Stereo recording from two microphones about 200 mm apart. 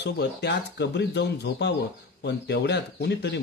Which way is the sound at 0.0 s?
60° left (ahead or behind).